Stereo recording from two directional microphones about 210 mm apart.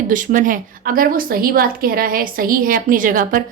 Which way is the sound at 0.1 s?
40° right (ahead or behind).